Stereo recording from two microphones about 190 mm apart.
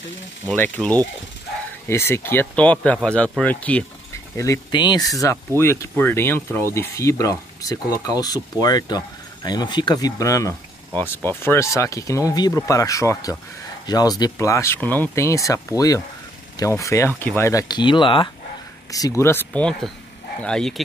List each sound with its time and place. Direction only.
0.5 s speech: 5° left (ahead or behind)
4.4 s speech: 20° left (ahead or behind); by 20.8 s 5° left (ahead or behind)